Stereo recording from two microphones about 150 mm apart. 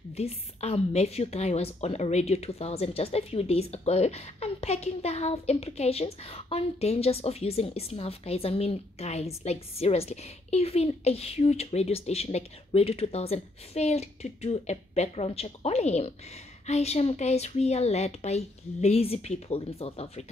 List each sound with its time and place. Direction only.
0.1 s a woman's voice: 45° left (ahead or behind)